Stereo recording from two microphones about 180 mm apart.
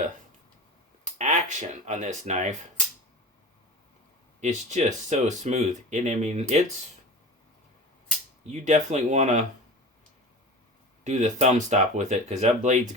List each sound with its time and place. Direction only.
1.2 s speech: 40° right (ahead or behind)
4.4 s speech: 40° right (ahead or behind)
8.4 s speech: 40° right (ahead or behind)
11.0 s speech: 40° right (ahead or behind)